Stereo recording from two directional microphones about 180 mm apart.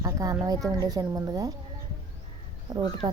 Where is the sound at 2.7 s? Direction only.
20° right (ahead or behind).